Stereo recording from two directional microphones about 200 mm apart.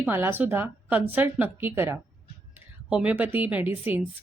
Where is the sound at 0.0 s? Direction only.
10° right (ahead or behind).